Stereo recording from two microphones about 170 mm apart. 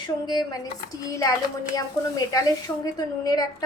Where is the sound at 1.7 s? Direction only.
20° left (ahead or behind).